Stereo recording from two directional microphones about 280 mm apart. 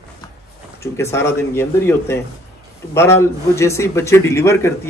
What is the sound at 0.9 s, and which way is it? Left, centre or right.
A man's voice, centre.